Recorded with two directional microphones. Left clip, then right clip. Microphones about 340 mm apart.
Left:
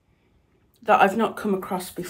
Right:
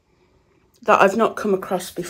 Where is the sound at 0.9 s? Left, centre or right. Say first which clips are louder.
Right 3 dB; centre.